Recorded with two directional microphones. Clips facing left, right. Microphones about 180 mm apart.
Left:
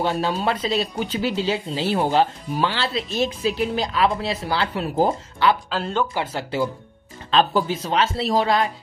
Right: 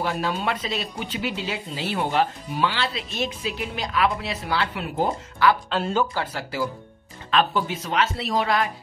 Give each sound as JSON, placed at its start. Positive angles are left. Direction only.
{"t": 0.0, "sound": "speech", "side_deg": 30}
{"t": 5.7, "sound": "speech", "side_deg": -5}
{"t": 6.1, "sound": "speech", "side_deg": 25}